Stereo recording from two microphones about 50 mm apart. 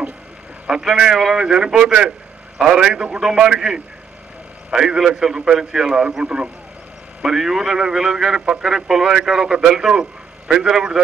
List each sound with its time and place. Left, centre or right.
0.7 s a man's voice: centre